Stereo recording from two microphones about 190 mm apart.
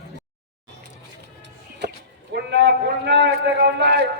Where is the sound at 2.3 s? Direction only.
60° right (ahead or behind).